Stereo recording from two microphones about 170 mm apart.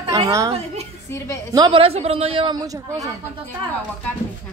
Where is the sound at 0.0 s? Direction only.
20° right (ahead or behind).